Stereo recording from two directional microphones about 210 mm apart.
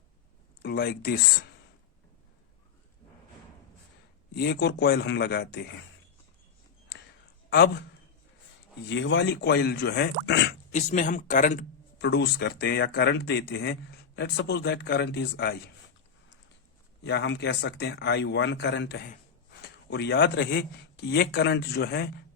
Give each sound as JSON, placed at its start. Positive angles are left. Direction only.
{"t": 0.6, "sound": "speech", "side_deg": 45}
{"t": 4.4, "sound": "speech", "side_deg": 50}
{"t": 7.5, "sound": "speech", "side_deg": 55}
{"t": 8.9, "sound": "speech", "side_deg": 60}
{"t": 10.7, "sound": "speech", "side_deg": 35}
{"t": 11.9, "sound": "speech", "side_deg": 55}
{"t": 17.1, "sound": "speech", "side_deg": 55}